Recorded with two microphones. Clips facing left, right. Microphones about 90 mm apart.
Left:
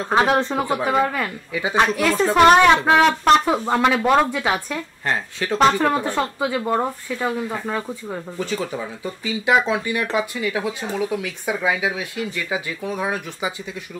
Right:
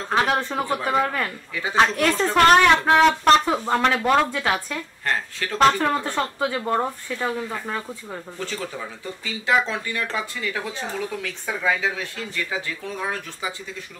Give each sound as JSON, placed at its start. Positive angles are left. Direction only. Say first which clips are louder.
{"t": 0.1, "sound": "speech", "louder": "left 4 dB", "side_deg": 20}